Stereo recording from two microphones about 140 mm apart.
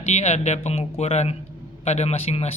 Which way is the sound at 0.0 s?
55° left (ahead or behind).